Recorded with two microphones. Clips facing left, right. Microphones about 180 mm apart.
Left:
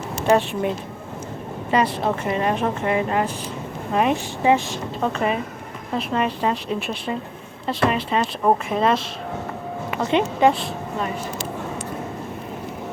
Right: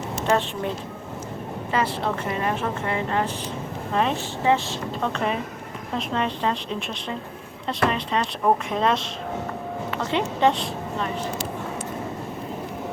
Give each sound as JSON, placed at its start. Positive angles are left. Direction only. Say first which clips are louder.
{"t": 0.3, "sound": "speech", "louder": "left 5 dB", "side_deg": 10}
{"t": 1.7, "sound": "speech", "louder": "left 4 dB", "side_deg": 15}
{"t": 9.9, "sound": "speech", "louder": "left 5 dB", "side_deg": 15}
{"t": 10.5, "sound": "a woman's voice", "louder": "left 1 dB", "side_deg": 5}